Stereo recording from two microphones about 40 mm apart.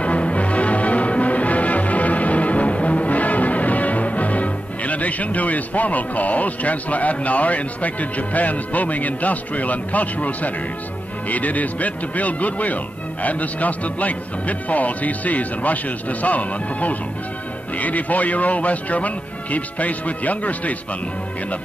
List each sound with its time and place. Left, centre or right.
0.0 s music: left
11.2 s speech: left